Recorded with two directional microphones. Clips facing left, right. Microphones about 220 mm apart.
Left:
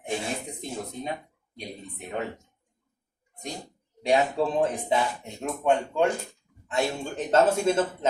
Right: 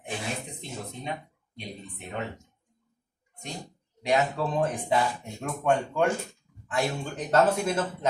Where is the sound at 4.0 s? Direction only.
30° left (ahead or behind).